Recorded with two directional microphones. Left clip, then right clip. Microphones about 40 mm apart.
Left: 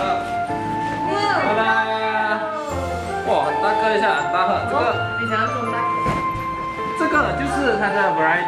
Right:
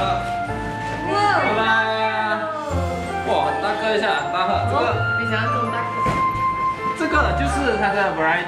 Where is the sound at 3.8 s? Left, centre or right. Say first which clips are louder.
Left 2 dB; left.